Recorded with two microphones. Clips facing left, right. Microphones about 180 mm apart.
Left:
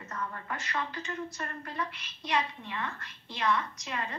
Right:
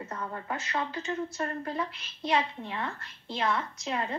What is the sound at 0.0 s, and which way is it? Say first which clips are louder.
A woman's voice: right 2 dB; 30° right (ahead or behind).